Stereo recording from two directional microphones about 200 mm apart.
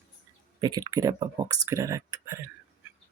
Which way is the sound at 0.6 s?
20° right (ahead or behind).